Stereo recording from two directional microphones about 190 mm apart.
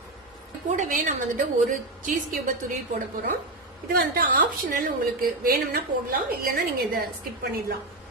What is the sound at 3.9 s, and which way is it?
A woman's voice, 50° right (ahead or behind).